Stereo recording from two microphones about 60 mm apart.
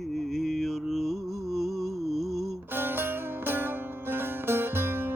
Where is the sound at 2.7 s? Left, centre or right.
Right.